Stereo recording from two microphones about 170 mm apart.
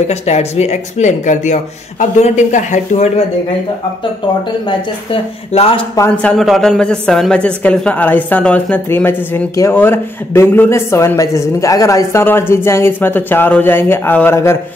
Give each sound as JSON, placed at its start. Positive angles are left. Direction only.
{"t": 0.1, "sound": "speech", "side_deg": 40}
{"t": 4.6, "sound": "speech", "side_deg": 35}
{"t": 5.9, "sound": "a woman's voice", "side_deg": 15}
{"t": 6.3, "sound": "a woman's voice", "side_deg": 0}